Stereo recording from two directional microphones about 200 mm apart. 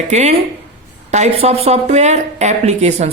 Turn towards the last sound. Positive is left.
turn(degrees=-35)  # may be behind; listen again after turning